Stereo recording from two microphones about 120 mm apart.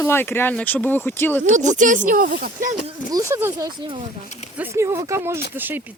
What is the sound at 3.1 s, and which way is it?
Speech, 25° right (ahead or behind).